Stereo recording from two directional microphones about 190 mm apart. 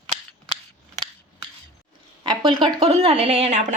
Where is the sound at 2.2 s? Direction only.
25° right (ahead or behind).